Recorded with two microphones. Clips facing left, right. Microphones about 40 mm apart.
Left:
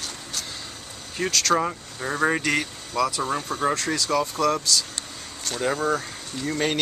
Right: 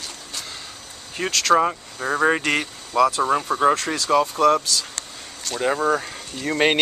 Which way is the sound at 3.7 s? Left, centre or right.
Centre.